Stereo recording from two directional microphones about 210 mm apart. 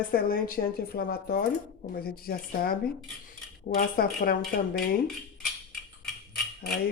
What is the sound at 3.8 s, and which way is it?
Speech, 45° left (ahead or behind).